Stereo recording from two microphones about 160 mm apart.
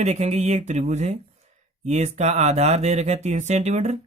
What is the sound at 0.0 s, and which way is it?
Speech, 45° right (ahead or behind).